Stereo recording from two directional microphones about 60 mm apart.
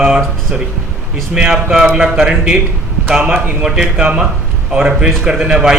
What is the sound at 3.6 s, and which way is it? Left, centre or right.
A man's voice, centre.